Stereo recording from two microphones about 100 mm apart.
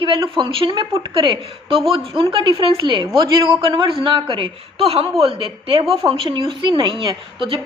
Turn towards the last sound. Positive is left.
turn(degrees=-55)  # may be behind; listen again after turning